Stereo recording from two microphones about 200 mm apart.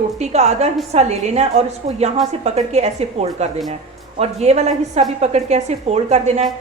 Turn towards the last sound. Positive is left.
turn(degrees=-35)  # may be behind; listen again after turning